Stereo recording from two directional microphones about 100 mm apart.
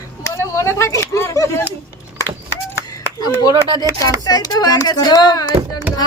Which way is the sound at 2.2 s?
25° left (ahead or behind).